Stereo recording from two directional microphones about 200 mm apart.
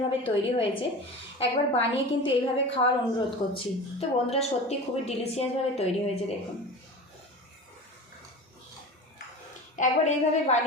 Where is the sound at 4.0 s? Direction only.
30° left (ahead or behind).